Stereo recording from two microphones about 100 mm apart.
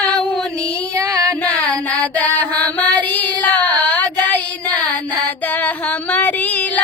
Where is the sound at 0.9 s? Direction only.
35° right (ahead or behind).